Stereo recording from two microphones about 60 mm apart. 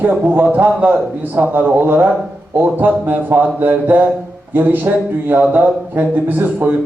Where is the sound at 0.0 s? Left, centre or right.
Right.